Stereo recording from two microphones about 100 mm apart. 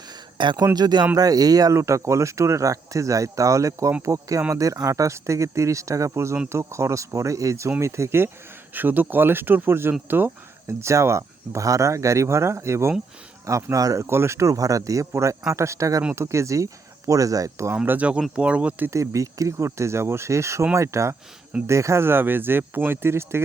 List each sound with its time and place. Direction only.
0.6 s speech: 40° right (ahead or behind)
17.8 s speech: 15° right (ahead or behind)
18.9 s speech: 30° right (ahead or behind)